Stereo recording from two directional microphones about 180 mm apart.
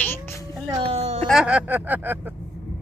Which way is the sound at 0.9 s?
35° right (ahead or behind).